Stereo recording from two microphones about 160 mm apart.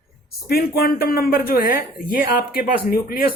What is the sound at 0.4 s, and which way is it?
Speech, 70° left (ahead or behind).